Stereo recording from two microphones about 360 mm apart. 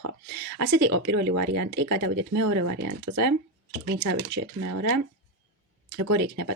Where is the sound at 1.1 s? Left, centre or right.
Right.